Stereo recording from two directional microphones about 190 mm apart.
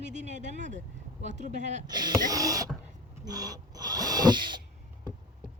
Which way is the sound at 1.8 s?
20° right (ahead or behind).